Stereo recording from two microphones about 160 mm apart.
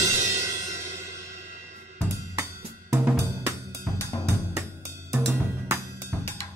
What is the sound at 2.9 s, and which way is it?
Hi-hat, 15° right (ahead or behind).